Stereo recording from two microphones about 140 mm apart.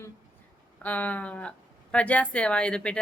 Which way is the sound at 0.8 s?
10° left (ahead or behind).